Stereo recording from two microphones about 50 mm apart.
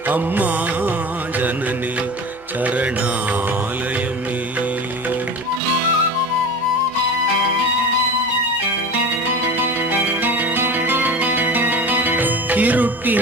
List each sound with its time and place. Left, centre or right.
0.1 s music: right
2.6 s mantra: right
9.2 s music: right